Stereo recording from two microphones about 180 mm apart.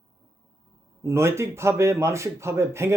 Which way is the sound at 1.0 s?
15° right (ahead or behind).